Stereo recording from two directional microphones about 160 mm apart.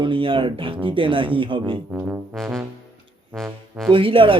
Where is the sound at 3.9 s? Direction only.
30° right (ahead or behind).